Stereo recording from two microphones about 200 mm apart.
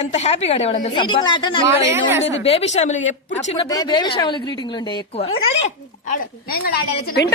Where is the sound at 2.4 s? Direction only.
30° left (ahead or behind).